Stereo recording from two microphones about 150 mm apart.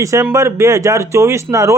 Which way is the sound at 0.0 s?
20° right (ahead or behind).